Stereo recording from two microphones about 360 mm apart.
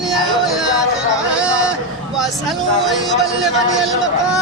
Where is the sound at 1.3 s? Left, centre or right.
Centre.